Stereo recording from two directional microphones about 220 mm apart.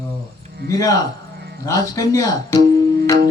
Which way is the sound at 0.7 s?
15° left (ahead or behind).